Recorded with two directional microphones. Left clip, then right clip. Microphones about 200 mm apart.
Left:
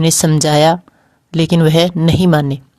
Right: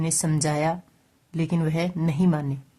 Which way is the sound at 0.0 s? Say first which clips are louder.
Left 13 dB; 40° left (ahead or behind).